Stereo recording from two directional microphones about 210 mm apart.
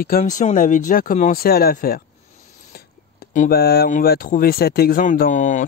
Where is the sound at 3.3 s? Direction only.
40° left (ahead or behind).